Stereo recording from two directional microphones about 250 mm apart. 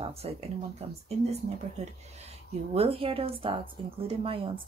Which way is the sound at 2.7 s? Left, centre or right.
Right.